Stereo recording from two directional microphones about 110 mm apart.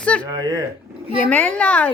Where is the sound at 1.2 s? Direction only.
15° left (ahead or behind).